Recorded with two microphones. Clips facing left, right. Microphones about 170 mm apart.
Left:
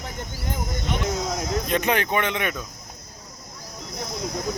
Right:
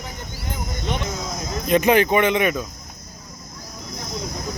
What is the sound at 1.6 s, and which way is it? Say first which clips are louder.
Speech: right 10 dB; 5° right (ahead or behind).